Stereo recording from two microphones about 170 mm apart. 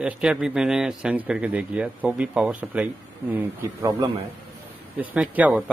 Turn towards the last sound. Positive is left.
turn(degrees=-10)  # may be behind; listen again after turning